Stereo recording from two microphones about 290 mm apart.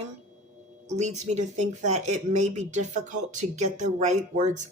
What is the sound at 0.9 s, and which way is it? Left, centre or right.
Speech, right.